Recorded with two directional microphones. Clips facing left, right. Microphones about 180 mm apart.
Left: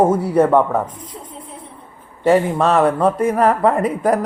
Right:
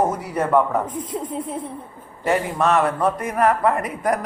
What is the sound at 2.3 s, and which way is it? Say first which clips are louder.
Speech: left 5 dB; 30° left (ahead or behind).